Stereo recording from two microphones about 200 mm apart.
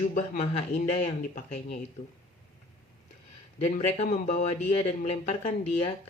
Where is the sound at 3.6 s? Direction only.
30° left (ahead or behind).